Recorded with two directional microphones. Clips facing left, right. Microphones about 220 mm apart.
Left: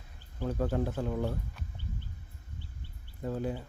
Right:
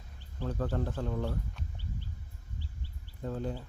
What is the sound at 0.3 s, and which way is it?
Speech, 10° left (ahead or behind).